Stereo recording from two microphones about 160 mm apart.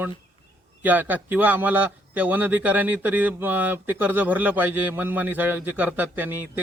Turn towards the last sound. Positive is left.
turn(degrees=-10)  # may be behind; listen again after turning